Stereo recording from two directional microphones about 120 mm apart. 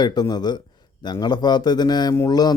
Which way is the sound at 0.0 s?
35° left (ahead or behind).